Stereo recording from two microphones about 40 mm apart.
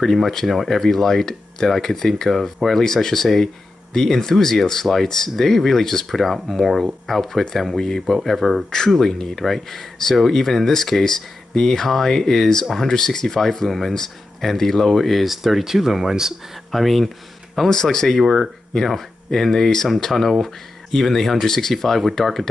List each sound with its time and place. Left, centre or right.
0.0 s speech: centre
8.6 s speech: centre
16.7 s speech: centre
17.6 s speech: centre